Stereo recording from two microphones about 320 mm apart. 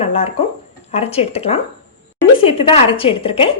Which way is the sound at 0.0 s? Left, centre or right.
Centre.